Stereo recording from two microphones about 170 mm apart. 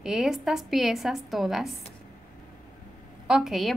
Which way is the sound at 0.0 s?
Centre (ahead or behind).